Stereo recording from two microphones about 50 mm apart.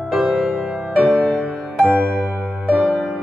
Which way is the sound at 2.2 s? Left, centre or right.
Right.